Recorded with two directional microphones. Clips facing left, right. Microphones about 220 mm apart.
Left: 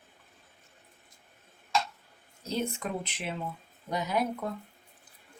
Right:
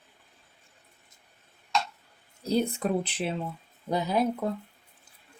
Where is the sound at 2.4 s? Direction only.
35° right (ahead or behind).